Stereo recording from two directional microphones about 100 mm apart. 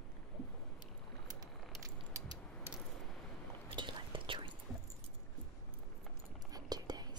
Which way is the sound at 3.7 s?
55° right (ahead or behind).